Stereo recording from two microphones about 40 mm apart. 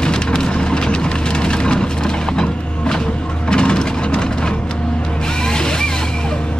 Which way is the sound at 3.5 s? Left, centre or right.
Left.